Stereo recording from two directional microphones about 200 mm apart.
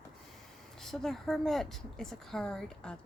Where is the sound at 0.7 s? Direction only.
Centre (ahead or behind).